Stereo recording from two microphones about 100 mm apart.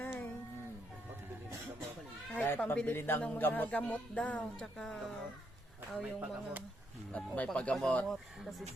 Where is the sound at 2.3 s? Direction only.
15° left (ahead or behind).